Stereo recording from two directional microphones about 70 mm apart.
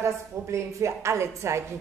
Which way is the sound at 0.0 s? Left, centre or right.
Right.